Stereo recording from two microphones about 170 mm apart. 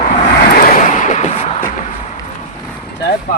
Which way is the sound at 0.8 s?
50° left (ahead or behind).